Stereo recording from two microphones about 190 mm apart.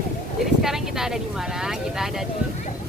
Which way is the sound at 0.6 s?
Centre (ahead or behind).